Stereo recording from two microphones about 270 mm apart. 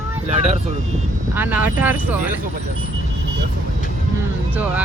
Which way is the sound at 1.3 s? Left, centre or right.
Centre.